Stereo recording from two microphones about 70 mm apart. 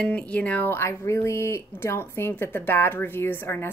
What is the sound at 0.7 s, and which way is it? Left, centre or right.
Speech, left.